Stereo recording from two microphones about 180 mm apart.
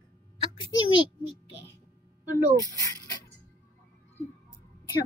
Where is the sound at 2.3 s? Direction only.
20° right (ahead or behind).